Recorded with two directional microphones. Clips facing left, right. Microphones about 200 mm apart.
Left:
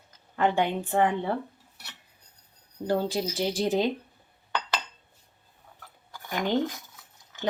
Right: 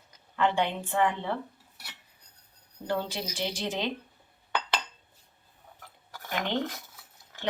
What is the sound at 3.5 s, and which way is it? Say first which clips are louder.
Speech: left 9 dB; 35° left (ahead or behind).